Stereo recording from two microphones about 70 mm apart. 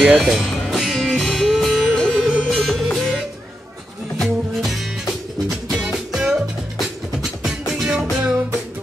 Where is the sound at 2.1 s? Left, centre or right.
Centre.